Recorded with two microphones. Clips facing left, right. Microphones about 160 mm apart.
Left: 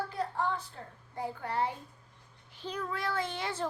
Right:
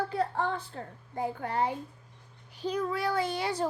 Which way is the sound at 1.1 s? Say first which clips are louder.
Right 3 dB; 20° right (ahead or behind).